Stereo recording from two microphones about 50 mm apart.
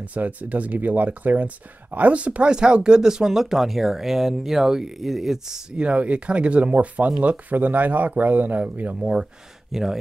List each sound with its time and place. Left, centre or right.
0.1 s speech: right; by 5.6 s centre
5.7 s speech: right
9.7 s speech: centre